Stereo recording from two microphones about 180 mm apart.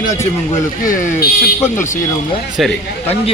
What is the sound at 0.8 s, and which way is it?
Speech, 45° left (ahead or behind).